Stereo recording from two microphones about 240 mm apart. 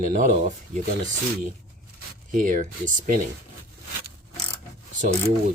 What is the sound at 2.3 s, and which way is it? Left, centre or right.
Speech, right.